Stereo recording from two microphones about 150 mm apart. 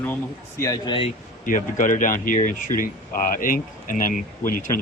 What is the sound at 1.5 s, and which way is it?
Speech, 60° left (ahead or behind).